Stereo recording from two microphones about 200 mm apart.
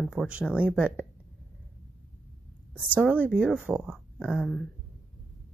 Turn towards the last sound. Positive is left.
turn(degrees=5)  # may be behind; listen again after turning